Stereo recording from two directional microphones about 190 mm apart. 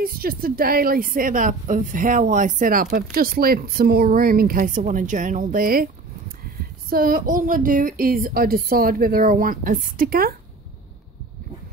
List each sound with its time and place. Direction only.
0.0 s speech: 50° right (ahead or behind)
6.9 s speech: 50° right (ahead or behind)